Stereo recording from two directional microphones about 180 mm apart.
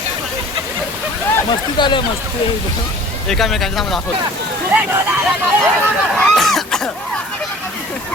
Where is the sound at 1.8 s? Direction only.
25° left (ahead or behind).